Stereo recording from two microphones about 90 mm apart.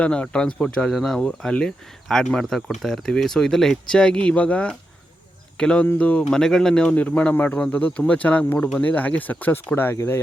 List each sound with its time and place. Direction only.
0.0 s speech: 10° left (ahead or behind); by 10.2 s 25° left (ahead or behind)